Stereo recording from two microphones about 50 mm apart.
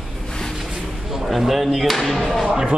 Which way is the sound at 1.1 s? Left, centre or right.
Centre.